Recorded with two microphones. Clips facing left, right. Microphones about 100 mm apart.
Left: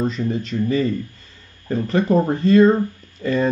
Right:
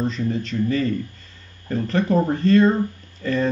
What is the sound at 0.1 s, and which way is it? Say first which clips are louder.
Speech: left 1 dB; 10° left (ahead or behind).